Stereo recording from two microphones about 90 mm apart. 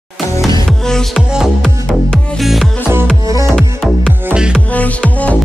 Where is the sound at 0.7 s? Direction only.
5° left (ahead or behind).